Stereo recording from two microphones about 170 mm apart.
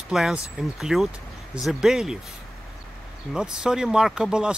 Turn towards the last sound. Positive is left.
turn(degrees=-5)  # may be behind; listen again after turning